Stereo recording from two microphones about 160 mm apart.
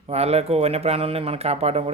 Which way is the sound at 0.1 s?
40° right (ahead or behind).